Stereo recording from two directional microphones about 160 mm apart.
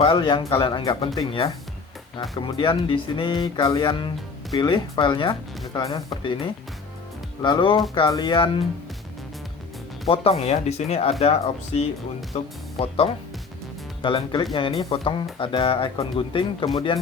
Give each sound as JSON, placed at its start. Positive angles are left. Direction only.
{"t": 0.0, "sound": "speech", "side_deg": 30}
{"t": 7.4, "sound": "speech", "side_deg": 30}
{"t": 10.1, "sound": "speech", "side_deg": 40}
{"t": 14.0, "sound": "speech", "side_deg": 30}